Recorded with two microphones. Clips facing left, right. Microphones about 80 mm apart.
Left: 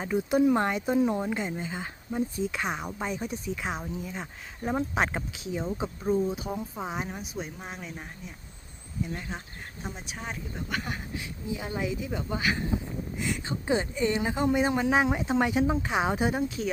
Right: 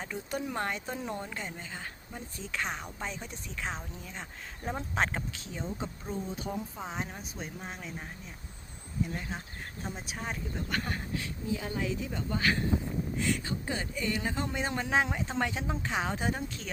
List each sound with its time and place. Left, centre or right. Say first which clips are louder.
0.0 s speech: left 12 dB; centre
0.9 s speech: left 12 dB; centre
1.2 s speech: left 9 dB; centre
9.8 s speech: left 1 dB; centre